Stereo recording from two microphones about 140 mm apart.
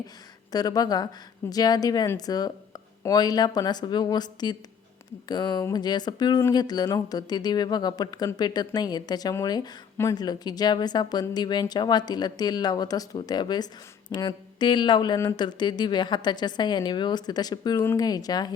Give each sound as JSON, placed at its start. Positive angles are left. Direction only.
{"t": 0.5, "sound": "speech", "side_deg": 25}